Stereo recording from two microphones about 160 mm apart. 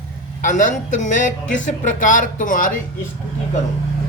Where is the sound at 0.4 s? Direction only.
50° left (ahead or behind).